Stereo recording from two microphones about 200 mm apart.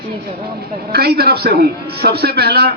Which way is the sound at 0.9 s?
50° right (ahead or behind).